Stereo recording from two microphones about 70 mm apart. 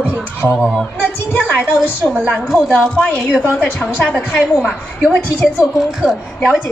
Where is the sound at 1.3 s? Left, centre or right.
Left.